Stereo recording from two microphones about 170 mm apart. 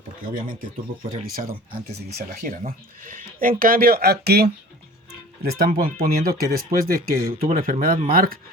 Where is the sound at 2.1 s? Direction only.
60° right (ahead or behind).